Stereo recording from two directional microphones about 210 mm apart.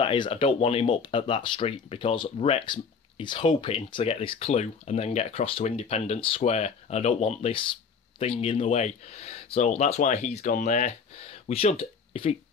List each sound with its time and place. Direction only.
0.0 s speech: 25° left (ahead or behind)